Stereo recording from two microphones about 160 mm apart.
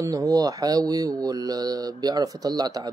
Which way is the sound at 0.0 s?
20° right (ahead or behind).